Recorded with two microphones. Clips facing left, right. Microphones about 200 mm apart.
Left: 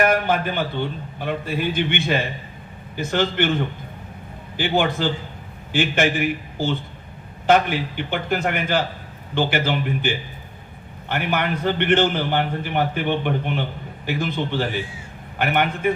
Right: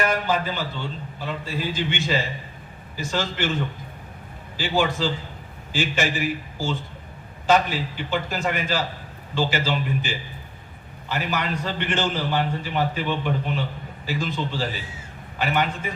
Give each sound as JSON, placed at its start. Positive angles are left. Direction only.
{"t": 0.0, "sound": "a man's voice", "side_deg": 55}